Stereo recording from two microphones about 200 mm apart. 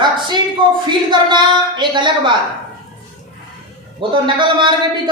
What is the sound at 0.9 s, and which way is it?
A woman's voice, 20° right (ahead or behind).